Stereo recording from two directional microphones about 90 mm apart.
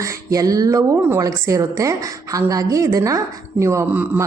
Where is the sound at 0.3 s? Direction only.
40° right (ahead or behind).